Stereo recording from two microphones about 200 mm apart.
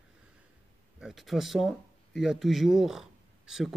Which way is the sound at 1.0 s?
Centre (ahead or behind).